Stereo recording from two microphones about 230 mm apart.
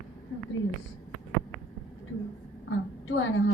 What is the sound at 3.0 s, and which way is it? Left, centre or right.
Speech, left.